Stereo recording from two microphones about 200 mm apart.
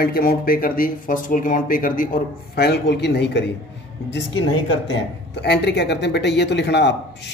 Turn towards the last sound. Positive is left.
turn(degrees=60)  # may be behind; listen again after turning